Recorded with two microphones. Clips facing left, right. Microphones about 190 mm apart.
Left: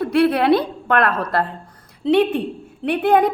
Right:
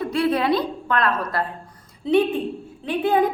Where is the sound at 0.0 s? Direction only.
65° left (ahead or behind).